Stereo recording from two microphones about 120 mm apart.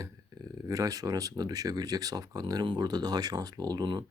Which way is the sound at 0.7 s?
30° right (ahead or behind).